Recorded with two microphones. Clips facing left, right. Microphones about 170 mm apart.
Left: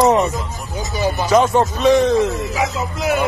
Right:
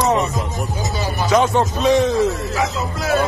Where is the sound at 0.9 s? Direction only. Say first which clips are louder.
Left 7 dB; 20° left (ahead or behind).